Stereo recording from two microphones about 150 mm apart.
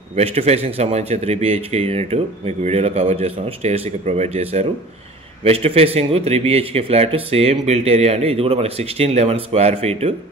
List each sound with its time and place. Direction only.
0.1 s a man's voice: 40° right (ahead or behind)